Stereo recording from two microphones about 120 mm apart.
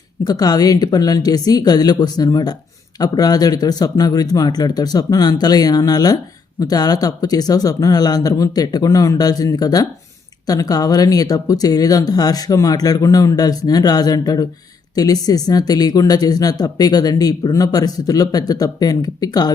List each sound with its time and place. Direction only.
0.3 s speech: 35° left (ahead or behind)